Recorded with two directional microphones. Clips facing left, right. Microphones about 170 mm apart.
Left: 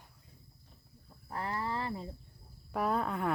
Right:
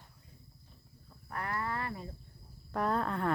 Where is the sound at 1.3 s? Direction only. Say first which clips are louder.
Left 1 dB; 25° left (ahead or behind).